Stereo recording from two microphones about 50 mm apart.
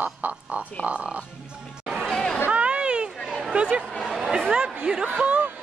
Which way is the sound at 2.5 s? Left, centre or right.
Right.